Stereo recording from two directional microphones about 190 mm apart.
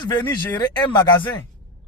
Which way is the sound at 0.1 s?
20° left (ahead or behind).